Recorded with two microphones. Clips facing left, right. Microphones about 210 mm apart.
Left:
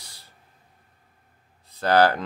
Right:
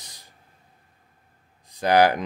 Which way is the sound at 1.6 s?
15° right (ahead or behind).